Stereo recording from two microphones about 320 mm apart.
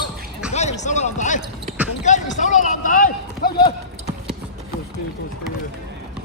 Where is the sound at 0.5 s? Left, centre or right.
Left.